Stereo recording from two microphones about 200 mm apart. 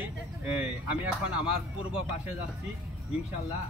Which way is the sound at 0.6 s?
5° right (ahead or behind).